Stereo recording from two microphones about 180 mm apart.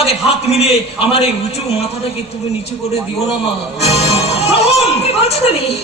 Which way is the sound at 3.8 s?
35° left (ahead or behind).